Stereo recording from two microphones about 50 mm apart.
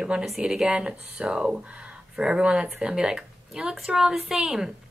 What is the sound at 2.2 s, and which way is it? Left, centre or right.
A woman's voice, centre.